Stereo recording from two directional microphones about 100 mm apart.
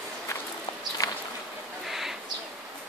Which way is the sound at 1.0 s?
35° left (ahead or behind).